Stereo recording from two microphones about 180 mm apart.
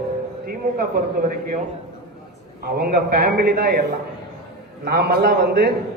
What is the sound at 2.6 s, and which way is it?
A man's voice, 60° right (ahead or behind).